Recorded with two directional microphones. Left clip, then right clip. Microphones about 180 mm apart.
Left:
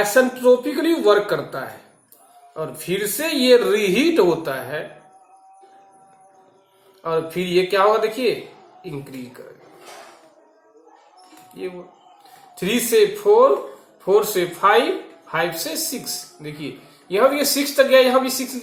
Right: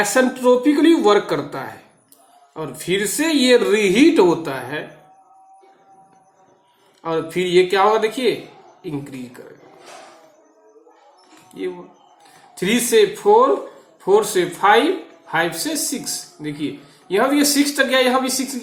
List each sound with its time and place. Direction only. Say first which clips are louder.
0.0 s speech: even; 50° right (ahead or behind)
7.0 s speech: right 1 dB; 50° right (ahead or behind)
12.5 s speech: right 2 dB; 55° right (ahead or behind)
17.1 s speech: even; 60° right (ahead or behind)